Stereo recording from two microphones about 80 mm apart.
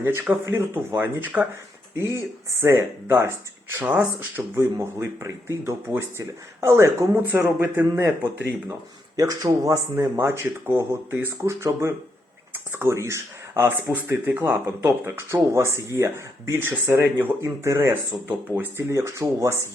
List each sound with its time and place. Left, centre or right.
0.3 s a man's voice: centre
0.7 s a man's voice: right
2.6 s speech: right
3.8 s a man's voice: right
4.5 s a man's voice: right
9.1 s speech: right
9.9 s a man's voice: right
18.3 s a man's voice: right
18.9 s speech: right